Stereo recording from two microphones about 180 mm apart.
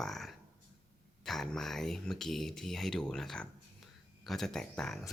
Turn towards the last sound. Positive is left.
turn(degrees=5)  # may be behind; listen again after turning